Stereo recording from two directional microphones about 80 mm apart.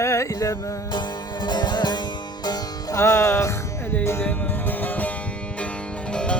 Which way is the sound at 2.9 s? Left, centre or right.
Left.